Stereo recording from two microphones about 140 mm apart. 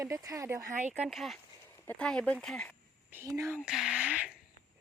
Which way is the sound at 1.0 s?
Centre (ahead or behind).